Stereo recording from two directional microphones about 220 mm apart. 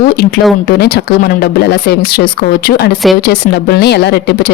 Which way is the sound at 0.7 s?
45° left (ahead or behind).